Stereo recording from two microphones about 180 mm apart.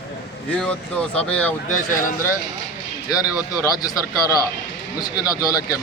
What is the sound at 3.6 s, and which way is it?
Speech, 20° left (ahead or behind).